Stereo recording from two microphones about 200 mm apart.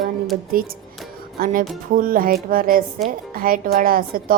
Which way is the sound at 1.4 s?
45° right (ahead or behind).